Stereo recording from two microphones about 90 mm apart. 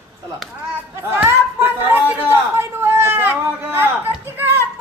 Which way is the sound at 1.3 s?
25° right (ahead or behind).